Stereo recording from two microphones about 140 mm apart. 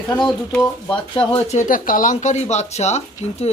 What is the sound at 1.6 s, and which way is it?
Speech, 75° left (ahead or behind).